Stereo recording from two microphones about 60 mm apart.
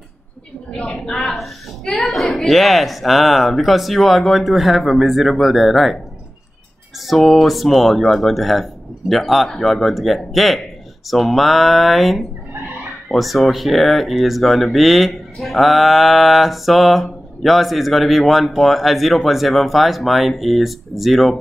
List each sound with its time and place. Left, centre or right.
0.7 s a woman's voice: centre
7.1 s speech: centre